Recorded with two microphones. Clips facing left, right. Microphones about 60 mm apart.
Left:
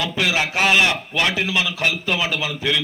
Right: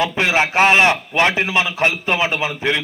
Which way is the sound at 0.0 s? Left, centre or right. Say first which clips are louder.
Right 4 dB; right.